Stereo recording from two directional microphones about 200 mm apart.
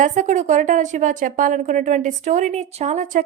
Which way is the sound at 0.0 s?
40° right (ahead or behind).